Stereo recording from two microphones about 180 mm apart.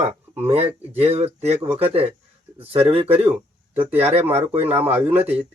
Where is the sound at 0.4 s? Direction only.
35° right (ahead or behind).